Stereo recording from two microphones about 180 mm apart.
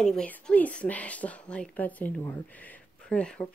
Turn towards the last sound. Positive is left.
turn(degrees=5)  # may be behind; listen again after turning